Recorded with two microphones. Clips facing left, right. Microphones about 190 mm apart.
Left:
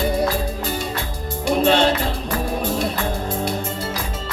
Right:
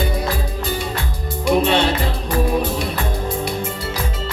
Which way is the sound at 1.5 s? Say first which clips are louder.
Right 1 dB; 60° right (ahead or behind).